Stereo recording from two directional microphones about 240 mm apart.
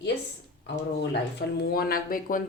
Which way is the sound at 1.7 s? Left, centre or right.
Left.